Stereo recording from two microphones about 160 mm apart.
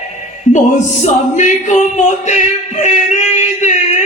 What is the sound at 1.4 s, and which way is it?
Speech, 50° left (ahead or behind).